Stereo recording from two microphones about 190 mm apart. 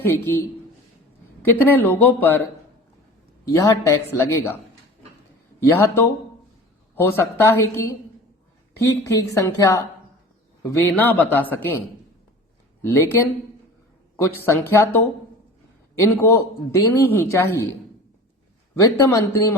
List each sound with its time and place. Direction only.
0.0 s a man's voice: 10° left (ahead or behind)
1.5 s a man's voice: 10° left (ahead or behind)
3.5 s a man's voice: 15° left (ahead or behind)
5.6 s a man's voice: 15° left (ahead or behind)
12.8 s a man's voice: 15° left (ahead or behind)
14.2 s a man's voice: 15° left (ahead or behind)
18.8 s a man's voice: 20° left (ahead or behind)